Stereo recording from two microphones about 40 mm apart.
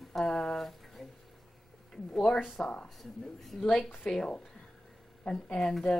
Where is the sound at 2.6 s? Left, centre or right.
Left.